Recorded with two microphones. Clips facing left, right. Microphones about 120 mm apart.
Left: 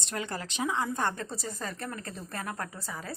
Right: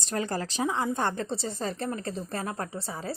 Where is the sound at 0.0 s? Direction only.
35° right (ahead or behind).